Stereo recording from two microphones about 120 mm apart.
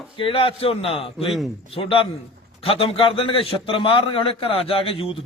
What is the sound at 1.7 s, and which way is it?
A man's voice, 50° left (ahead or behind).